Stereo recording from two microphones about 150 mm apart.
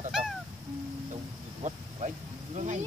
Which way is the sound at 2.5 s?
50° right (ahead or behind).